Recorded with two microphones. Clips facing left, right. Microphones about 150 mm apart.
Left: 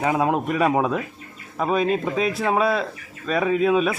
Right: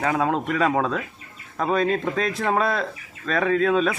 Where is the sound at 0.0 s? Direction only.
15° left (ahead or behind).